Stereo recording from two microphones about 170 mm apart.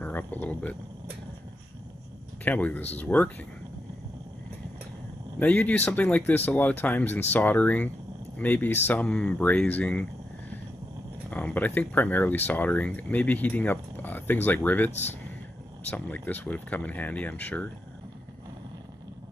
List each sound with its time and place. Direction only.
0.0 s speech: 10° left (ahead or behind)
2.4 s speech: 10° left (ahead or behind)
5.4 s speech: 10° left (ahead or behind)
11.2 s speech: 10° left (ahead or behind)
15.9 s speech: 10° left (ahead or behind)